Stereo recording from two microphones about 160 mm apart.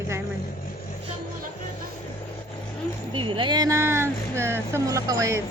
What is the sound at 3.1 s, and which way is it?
A woman's voice, 30° right (ahead or behind).